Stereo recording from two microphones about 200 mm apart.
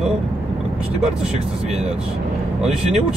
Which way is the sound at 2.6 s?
Centre (ahead or behind).